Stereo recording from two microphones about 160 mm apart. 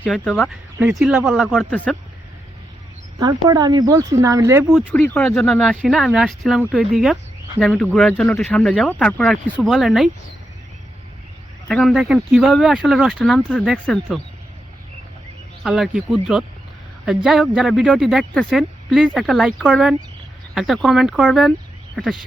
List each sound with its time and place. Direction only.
0.0 s speech: 5° left (ahead or behind)
1.7 s speech: 10° left (ahead or behind)
3.2 s speech: 25° right (ahead or behind)
5.2 s speech: 5° left (ahead or behind)
11.7 s speech: 5° left (ahead or behind)
15.6 s speech: centre (ahead or behind)
17.2 s speech: centre (ahead or behind)